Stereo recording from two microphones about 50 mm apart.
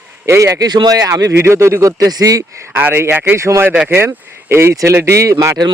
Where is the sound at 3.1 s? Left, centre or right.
Right.